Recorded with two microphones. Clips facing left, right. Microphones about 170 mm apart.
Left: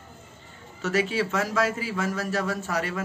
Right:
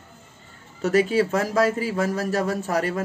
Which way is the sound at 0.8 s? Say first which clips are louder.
Right 6 dB; 40° right (ahead or behind).